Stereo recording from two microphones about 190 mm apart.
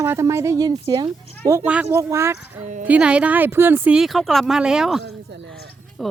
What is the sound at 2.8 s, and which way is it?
Speech, 5° right (ahead or behind).